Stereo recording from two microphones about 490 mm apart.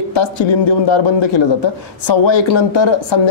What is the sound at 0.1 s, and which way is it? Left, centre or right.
Speech, left.